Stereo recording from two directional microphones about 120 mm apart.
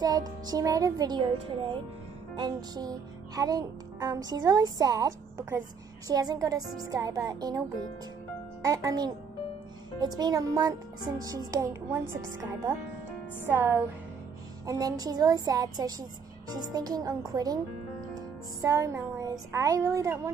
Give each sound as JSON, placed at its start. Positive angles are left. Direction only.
{"t": 0.0, "sound": "music", "side_deg": -35}
{"t": 8.6, "sound": "music", "side_deg": -30}
{"t": 13.5, "sound": "a woman's voice", "side_deg": -20}
{"t": 14.7, "sound": "music", "side_deg": -30}
{"t": 18.6, "sound": "a woman's voice", "side_deg": -25}